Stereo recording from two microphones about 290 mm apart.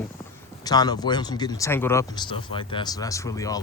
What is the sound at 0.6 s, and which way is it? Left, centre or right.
Speech, centre.